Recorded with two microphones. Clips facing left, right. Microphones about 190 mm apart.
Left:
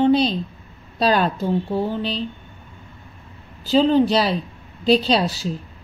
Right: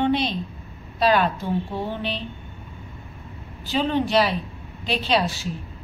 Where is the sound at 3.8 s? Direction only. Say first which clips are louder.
Left 3 dB; 35° left (ahead or behind).